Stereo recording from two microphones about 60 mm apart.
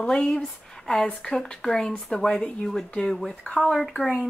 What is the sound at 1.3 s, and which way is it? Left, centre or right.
Speech, centre.